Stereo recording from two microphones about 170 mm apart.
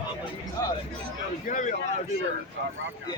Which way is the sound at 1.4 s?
50° left (ahead or behind).